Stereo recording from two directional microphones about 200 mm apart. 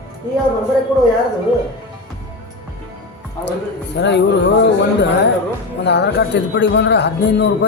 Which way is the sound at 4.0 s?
60° left (ahead or behind).